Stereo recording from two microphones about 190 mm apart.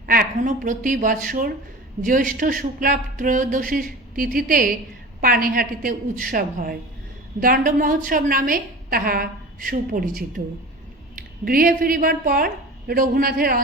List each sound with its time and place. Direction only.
0.0 s a woman's voice: 50° right (ahead or behind)